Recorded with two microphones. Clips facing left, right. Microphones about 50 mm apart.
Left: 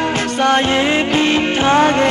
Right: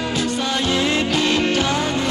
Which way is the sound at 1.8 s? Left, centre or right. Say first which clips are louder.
Left 9 dB; left.